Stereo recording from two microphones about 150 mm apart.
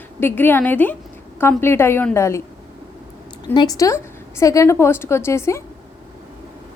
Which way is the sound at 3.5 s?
25° left (ahead or behind).